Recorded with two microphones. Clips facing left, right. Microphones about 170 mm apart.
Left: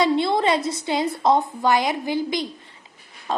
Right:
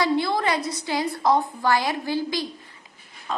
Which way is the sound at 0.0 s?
25° left (ahead or behind).